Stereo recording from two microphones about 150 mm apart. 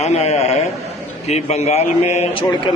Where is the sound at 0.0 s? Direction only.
45° left (ahead or behind).